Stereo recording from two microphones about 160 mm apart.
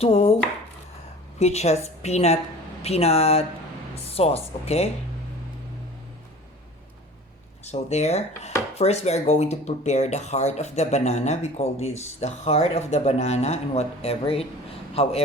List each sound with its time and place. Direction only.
0.0 s speech: 35° left (ahead or behind)
1.4 s speech: 40° left (ahead or behind)
7.6 s speech: 45° left (ahead or behind)